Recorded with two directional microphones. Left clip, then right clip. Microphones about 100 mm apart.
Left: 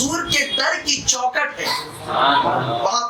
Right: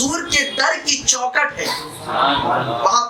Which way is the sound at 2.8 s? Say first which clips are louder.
Right 4 dB; 15° right (ahead or behind).